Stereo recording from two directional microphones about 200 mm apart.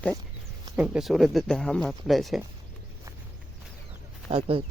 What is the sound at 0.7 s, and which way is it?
Speech, 5° right (ahead or behind).